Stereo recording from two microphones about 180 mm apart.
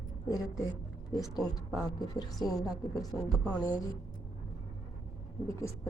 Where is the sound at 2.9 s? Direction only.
20° left (ahead or behind).